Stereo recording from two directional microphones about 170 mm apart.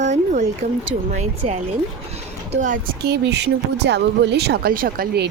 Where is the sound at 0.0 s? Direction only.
45° right (ahead or behind).